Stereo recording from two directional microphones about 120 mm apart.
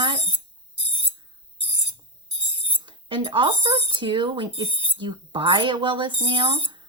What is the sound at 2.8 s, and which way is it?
Speech, 45° right (ahead or behind).